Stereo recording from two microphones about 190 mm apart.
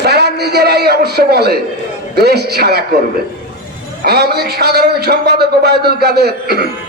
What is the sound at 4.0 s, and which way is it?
A man's voice, 55° right (ahead or behind).